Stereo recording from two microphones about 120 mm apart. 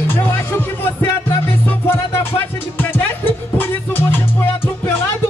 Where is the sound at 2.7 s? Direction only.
15° left (ahead or behind).